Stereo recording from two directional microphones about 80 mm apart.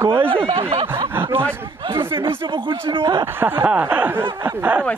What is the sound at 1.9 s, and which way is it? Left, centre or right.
Speech, right.